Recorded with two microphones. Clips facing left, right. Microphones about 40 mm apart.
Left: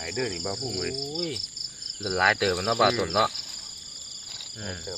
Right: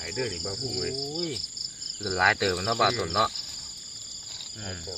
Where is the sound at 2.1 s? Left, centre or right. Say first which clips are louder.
Left 1 dB; centre.